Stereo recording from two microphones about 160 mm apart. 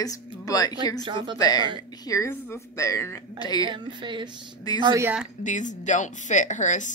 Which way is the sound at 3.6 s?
30° right (ahead or behind).